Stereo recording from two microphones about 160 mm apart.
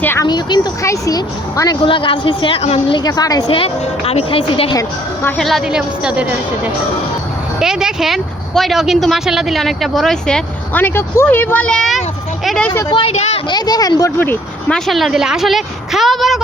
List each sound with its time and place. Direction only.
0.0 s speech: 15° left (ahead or behind)
0.3 s speech: 25° left (ahead or behind)
3.0 s a woman's voice: 25° left (ahead or behind)
3.6 s speech: 40° left (ahead or behind)
5.4 s speech: centre (ahead or behind)
7.6 s speech: 5° right (ahead or behind)
12.9 s speech: 35° left (ahead or behind)
13.5 s a woman's voice: 25° left (ahead or behind)
14.2 s speech: 10° left (ahead or behind)
14.8 s speech: centre (ahead or behind)